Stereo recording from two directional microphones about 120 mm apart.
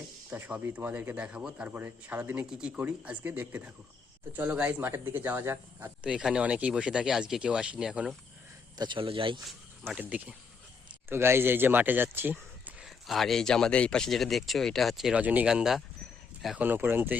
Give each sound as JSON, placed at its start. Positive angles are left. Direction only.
{"t": 0.3, "sound": "speech", "side_deg": -15}
{"t": 6.0, "sound": "speech", "side_deg": -10}
{"t": 8.8, "sound": "speech", "side_deg": -45}
{"t": 9.9, "sound": "speech", "side_deg": -10}
{"t": 12.8, "sound": "speech", "side_deg": 0}
{"t": 16.6, "sound": "speech", "side_deg": -15}